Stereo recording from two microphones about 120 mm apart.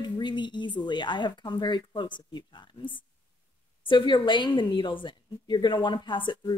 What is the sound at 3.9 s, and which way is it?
A woman's voice, 40° left (ahead or behind).